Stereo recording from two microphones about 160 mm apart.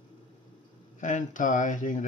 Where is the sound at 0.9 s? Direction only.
50° left (ahead or behind).